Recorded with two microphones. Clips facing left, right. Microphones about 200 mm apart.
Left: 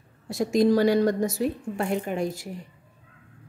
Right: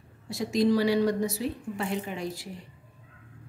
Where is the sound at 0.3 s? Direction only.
50° left (ahead or behind).